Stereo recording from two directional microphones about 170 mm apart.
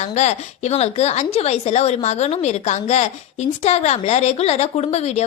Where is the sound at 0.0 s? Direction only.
40° left (ahead or behind).